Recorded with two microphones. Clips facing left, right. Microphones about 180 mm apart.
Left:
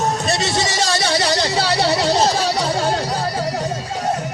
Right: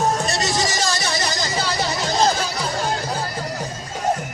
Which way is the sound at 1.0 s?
75° left (ahead or behind).